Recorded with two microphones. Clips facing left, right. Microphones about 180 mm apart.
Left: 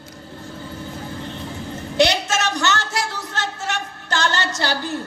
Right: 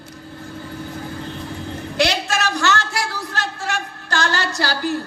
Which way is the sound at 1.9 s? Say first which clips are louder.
Left 2 dB; 20° left (ahead or behind).